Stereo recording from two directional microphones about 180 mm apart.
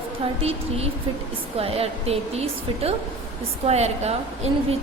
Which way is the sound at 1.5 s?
35° right (ahead or behind).